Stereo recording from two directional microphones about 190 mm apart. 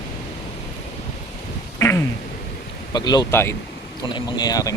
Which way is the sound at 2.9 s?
20° left (ahead or behind).